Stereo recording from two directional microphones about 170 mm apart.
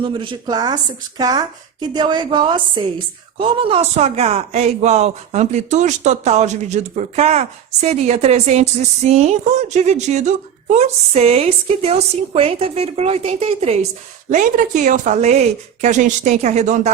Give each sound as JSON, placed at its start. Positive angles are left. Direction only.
{"t": 0.0, "sound": "a woman's voice", "side_deg": -30}
{"t": 14.3, "sound": "a woman's voice", "side_deg": -50}